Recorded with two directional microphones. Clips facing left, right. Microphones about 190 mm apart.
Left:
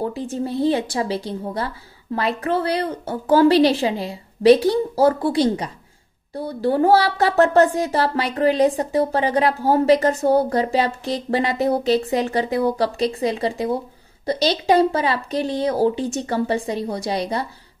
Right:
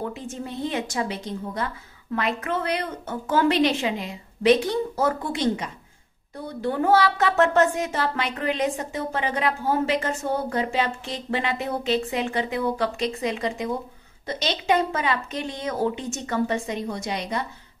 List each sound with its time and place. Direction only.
0.0 s speech: 35° left (ahead or behind)